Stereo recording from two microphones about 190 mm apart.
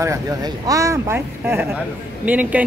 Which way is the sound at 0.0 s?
15° right (ahead or behind).